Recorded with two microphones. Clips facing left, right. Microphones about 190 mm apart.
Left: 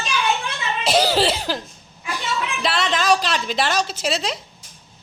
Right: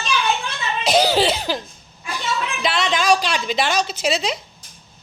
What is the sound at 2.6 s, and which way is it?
A woman's voice, 5° left (ahead or behind).